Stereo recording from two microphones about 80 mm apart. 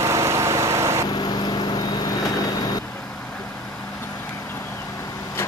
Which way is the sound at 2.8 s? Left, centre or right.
Centre.